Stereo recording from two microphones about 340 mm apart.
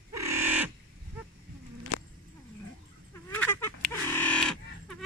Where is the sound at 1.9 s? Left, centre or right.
Left.